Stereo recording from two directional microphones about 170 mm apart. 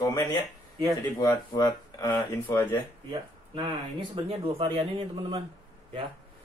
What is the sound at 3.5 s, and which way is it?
Speech, 30° right (ahead or behind).